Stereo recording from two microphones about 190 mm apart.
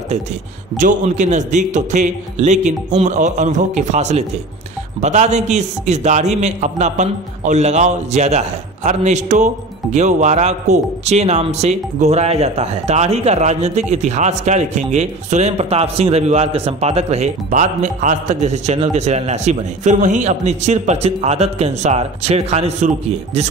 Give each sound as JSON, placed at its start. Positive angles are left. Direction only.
{"t": 0.7, "sound": "a man's voice", "side_deg": -40}